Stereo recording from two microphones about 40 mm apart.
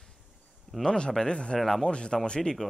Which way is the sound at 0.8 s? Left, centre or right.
Left.